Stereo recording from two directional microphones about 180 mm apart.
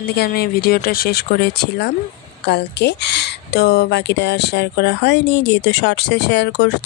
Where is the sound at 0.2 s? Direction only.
60° left (ahead or behind).